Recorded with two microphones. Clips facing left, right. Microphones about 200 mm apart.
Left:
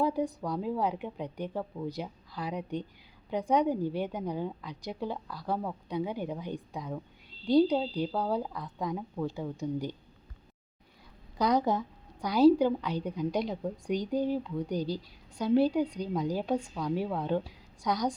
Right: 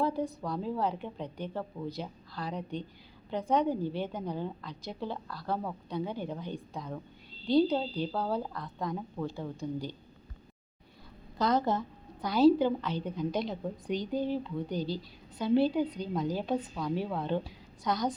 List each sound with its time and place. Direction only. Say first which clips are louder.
0.0 s a woman's voice: left 2 dB; 15° left (ahead or behind)
9.6 s a woman's voice: left 3 dB; 20° left (ahead or behind)
11.3 s a woman's voice: left 1 dB; 15° left (ahead or behind)
14.8 s a woman's voice: even; 40° left (ahead or behind)
15.4 s a woman's voice: left 1 dB; 10° left (ahead or behind)